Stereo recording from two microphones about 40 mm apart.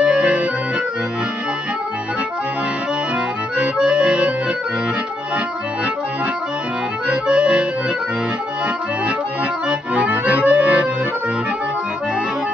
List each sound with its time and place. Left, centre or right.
0.0 s accordion: right
3.5 s accordion: right
7.1 s accordion: right
9.7 s accordion: right